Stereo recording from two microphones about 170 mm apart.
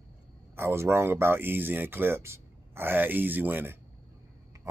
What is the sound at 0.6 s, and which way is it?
Speech, 15° right (ahead or behind).